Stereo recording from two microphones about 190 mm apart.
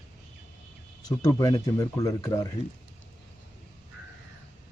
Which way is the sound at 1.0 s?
20° left (ahead or behind).